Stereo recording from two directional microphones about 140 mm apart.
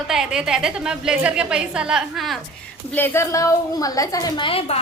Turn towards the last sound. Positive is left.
turn(degrees=45)  # may be behind; listen again after turning